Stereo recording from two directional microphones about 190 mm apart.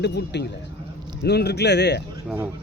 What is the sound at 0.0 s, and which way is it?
Speech, 65° left (ahead or behind).